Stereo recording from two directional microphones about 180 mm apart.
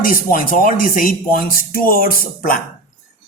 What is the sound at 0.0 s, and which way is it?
Speech, 50° left (ahead or behind).